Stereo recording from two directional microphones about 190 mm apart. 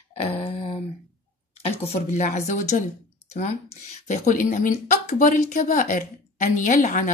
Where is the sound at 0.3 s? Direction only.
30° left (ahead or behind).